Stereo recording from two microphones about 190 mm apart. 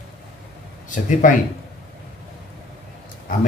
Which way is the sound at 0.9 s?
40° left (ahead or behind).